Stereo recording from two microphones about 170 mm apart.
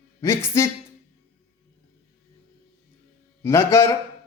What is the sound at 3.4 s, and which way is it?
Speech, 15° left (ahead or behind).